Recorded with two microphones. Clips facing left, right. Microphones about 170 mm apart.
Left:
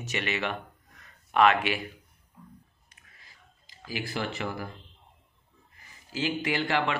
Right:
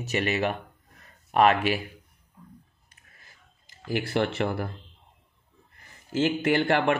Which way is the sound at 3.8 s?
65° right (ahead or behind).